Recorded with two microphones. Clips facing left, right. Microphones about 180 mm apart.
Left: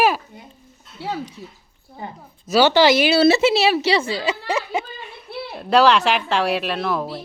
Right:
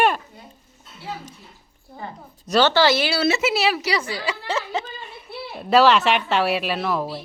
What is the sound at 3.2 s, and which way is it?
A woman's voice, 30° left (ahead or behind).